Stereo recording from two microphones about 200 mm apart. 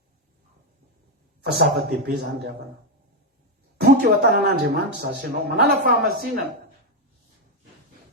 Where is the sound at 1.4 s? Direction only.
50° right (ahead or behind).